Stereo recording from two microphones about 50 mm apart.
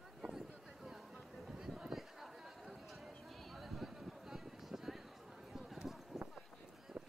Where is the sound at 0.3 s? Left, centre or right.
Centre.